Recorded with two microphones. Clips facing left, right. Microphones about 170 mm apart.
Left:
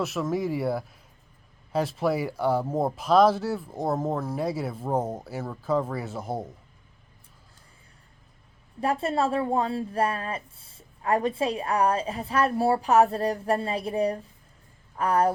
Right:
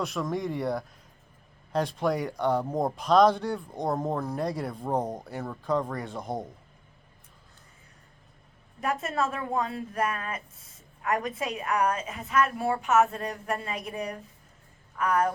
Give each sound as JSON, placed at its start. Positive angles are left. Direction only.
{"t": 0.0, "sound": "speech", "side_deg": 5}
{"t": 8.8, "sound": "speech", "side_deg": 30}